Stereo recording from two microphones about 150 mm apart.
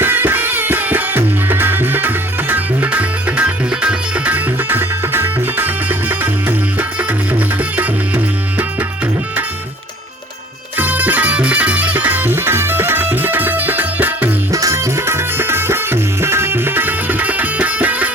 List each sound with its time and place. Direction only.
0.0 s music: 15° right (ahead or behind)
10.8 s music: 10° right (ahead or behind)